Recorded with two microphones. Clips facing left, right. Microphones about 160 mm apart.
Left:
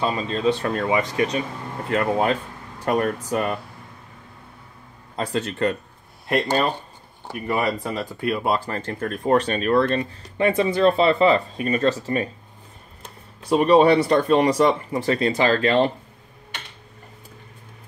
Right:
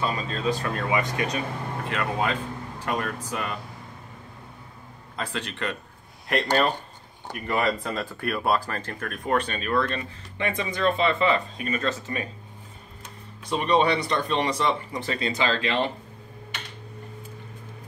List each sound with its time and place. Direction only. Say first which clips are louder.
0.0 s speech: left 5 dB; 30° left (ahead or behind)
5.1 s speech: left 7 dB; 35° left (ahead or behind)
7.2 s speech: left 2 dB; 15° left (ahead or behind); by 12.3 s 35° left (ahead or behind)
13.6 s speech: left 7 dB; 40° left (ahead or behind)